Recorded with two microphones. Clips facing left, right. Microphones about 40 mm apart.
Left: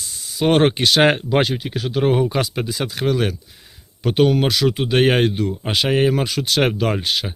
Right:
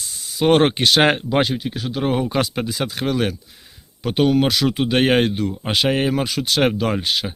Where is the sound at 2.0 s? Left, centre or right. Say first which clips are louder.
Left 4 dB; centre.